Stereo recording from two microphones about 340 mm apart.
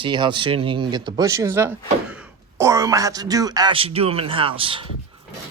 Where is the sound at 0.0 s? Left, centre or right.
Centre.